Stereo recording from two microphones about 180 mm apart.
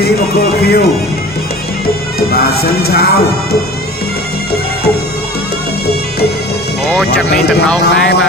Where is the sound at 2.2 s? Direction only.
60° left (ahead or behind).